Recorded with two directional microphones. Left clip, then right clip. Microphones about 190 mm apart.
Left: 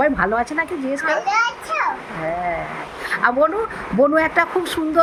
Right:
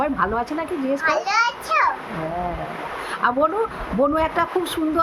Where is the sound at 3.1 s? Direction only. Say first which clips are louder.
Left 3 dB; 15° left (ahead or behind).